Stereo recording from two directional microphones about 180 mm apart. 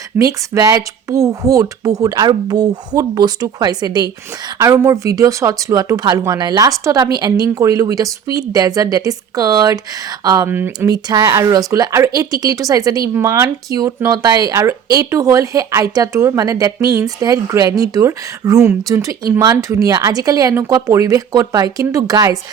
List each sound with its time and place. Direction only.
0.2 s a woman's voice: 20° right (ahead or behind)